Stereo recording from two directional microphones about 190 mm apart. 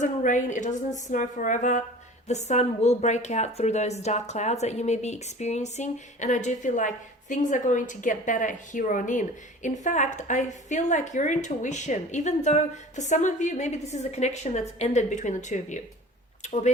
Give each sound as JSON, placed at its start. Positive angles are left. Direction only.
{"t": 0.0, "sound": "speech", "side_deg": 40}